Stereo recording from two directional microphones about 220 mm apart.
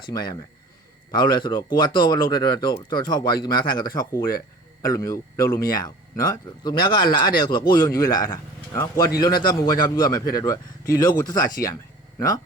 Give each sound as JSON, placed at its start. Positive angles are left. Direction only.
{"t": 0.0, "sound": "a man's voice", "side_deg": 20}